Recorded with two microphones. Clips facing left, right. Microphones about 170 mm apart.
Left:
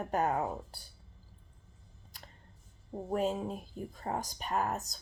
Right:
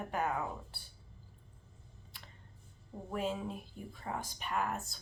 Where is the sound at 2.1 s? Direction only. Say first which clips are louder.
Left 3 dB; 40° left (ahead or behind).